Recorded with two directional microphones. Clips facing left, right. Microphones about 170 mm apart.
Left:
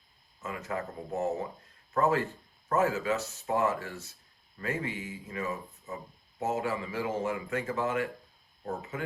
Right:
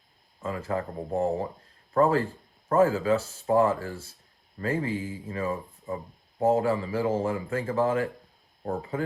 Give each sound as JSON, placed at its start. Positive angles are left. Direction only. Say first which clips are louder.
{"t": 0.4, "sound": "speech", "louder": "right 5 dB", "side_deg": -30}